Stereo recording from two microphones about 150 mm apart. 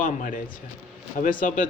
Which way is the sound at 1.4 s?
60° left (ahead or behind).